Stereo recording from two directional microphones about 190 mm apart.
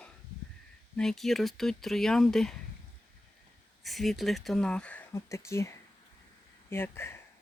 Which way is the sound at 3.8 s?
Centre (ahead or behind).